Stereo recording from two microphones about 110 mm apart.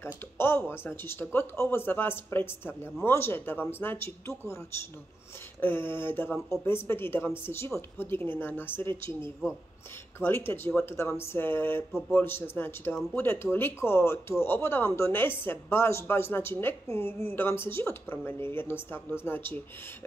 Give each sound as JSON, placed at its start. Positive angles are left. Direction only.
{"t": 0.0, "sound": "speech", "side_deg": 20}
{"t": 5.6, "sound": "speech", "side_deg": 20}
{"t": 10.1, "sound": "speech", "side_deg": 20}